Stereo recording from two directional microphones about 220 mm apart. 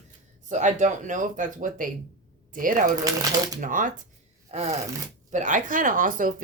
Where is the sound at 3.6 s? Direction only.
35° right (ahead or behind).